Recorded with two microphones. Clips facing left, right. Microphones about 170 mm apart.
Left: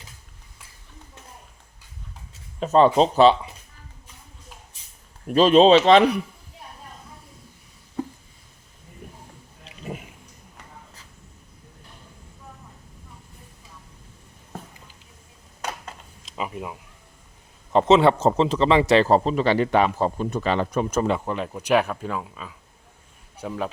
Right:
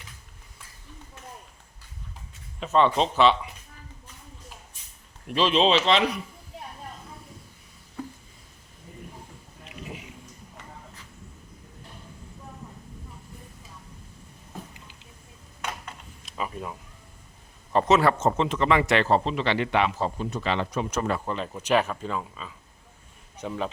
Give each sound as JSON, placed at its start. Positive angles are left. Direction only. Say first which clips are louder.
{"t": 2.6, "sound": "a man's voice", "louder": "left 5 dB", "side_deg": 40}
{"t": 5.3, "sound": "speech", "louder": "left 8 dB", "side_deg": 45}
{"t": 16.3, "sound": "a sound", "louder": "left 2 dB", "side_deg": 15}
{"t": 17.7, "sound": "a man's voice", "louder": "left 4 dB", "side_deg": 20}
{"t": 21.1, "sound": "speech", "louder": "left 4 dB", "side_deg": 10}